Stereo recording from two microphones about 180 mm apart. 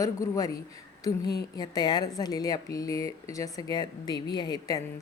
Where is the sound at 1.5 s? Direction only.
20° left (ahead or behind).